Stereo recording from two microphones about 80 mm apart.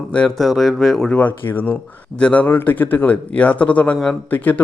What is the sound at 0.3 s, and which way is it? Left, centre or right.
Speech, centre.